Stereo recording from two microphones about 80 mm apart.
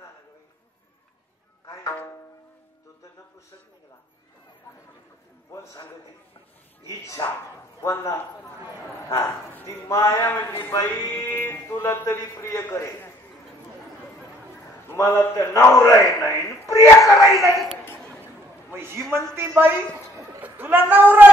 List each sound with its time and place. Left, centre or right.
5.5 s a sound: left
7.2 s speech: left
7.8 s a man's voice: left
14.9 s a man's voice: left
18.2 s a sound: right
19.3 s a woman's voice: right